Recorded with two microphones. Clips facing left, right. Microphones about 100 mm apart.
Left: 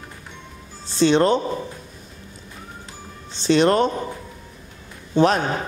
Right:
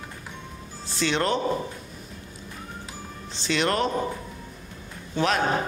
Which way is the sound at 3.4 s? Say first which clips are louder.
Left 8 dB; 30° left (ahead or behind).